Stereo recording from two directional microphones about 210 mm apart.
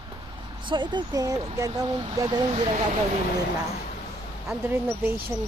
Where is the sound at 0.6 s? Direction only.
20° right (ahead or behind).